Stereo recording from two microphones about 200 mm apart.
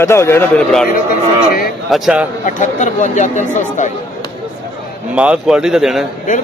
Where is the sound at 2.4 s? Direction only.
40° left (ahead or behind).